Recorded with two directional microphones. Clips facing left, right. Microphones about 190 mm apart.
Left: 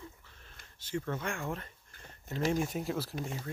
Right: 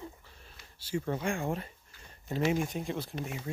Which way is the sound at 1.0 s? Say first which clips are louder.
Right 4 dB; 15° right (ahead or behind).